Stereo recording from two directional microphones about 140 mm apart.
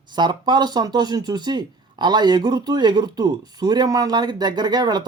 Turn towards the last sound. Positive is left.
turn(degrees=-30)  # may be behind; listen again after turning